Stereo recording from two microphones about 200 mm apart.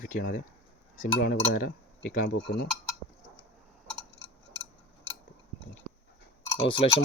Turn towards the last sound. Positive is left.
turn(degrees=30)  # may be behind; listen again after turning